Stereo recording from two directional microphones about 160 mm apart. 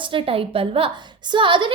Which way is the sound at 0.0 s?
35° right (ahead or behind).